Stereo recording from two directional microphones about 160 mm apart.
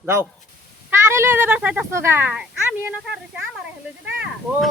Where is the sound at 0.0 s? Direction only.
15° right (ahead or behind).